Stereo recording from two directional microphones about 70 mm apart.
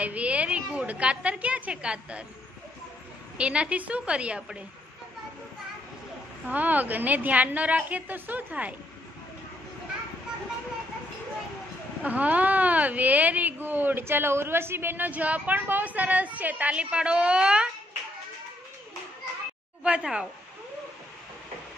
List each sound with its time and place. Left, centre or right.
0.0 s a woman's voice: centre
3.3 s a woman's voice: centre
6.5 s speech: right
12.0 s speech: right
19.8 s a woman's voice: centre